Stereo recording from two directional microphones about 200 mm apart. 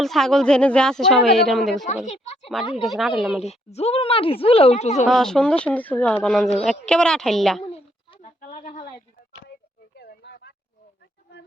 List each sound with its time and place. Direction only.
0.0 s speech: centre (ahead or behind)
2.0 s speech: 35° left (ahead or behind)
2.8 s speech: centre (ahead or behind)
3.4 s speech: 30° left (ahead or behind)
5.0 s speech: centre (ahead or behind)
7.6 s a sound: 30° left (ahead or behind)
8.4 s speech: 40° left (ahead or behind)
9.9 s a sound: 55° left (ahead or behind)